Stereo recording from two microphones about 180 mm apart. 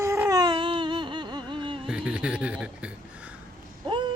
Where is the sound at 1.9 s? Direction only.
5° right (ahead or behind).